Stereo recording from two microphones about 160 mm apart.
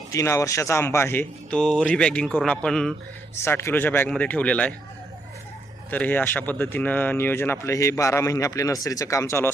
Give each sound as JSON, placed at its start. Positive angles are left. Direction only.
{"t": 0.1, "sound": "speech", "side_deg": 20}
{"t": 5.9, "sound": "speech", "side_deg": 10}